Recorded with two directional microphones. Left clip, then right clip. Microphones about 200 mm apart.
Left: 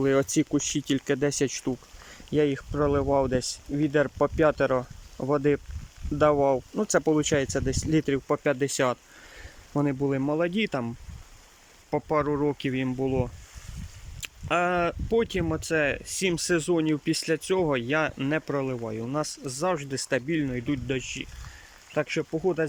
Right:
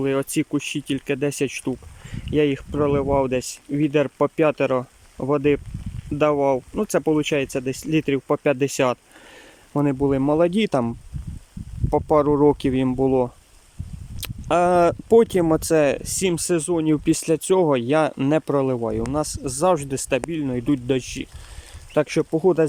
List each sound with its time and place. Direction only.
0.0 s speech: 5° right (ahead or behind); by 22.6 s 25° right (ahead or behind)